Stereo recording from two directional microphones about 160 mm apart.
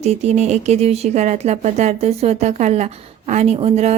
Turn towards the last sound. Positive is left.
turn(degrees=-40)  # may be behind; listen again after turning